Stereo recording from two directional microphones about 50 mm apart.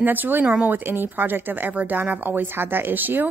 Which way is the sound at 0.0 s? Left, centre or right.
Right.